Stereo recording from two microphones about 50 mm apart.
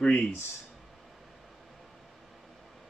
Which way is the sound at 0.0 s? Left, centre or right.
Left.